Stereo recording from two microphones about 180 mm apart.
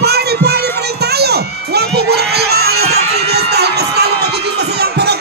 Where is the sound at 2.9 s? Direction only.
65° right (ahead or behind).